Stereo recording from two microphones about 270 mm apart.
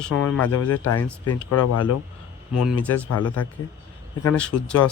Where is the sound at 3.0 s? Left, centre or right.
Left.